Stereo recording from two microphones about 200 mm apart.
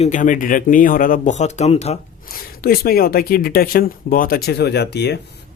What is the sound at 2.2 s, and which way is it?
Speech, 50° left (ahead or behind).